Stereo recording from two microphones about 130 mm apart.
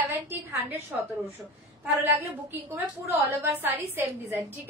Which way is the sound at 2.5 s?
15° right (ahead or behind).